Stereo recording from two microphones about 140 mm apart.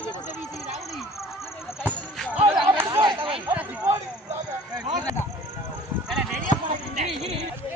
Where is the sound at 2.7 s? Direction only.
20° right (ahead or behind).